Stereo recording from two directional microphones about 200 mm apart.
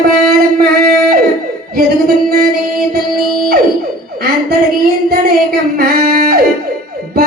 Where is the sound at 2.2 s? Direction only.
50° right (ahead or behind).